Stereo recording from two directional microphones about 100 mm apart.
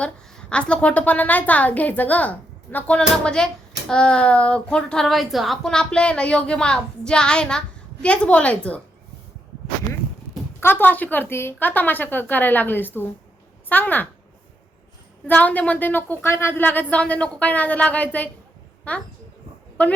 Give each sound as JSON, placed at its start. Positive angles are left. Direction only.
{"t": 0.0, "sound": "a woman's voice", "side_deg": 10}
{"t": 10.6, "sound": "a woman's voice", "side_deg": 20}
{"t": 15.3, "sound": "a woman's voice", "side_deg": 15}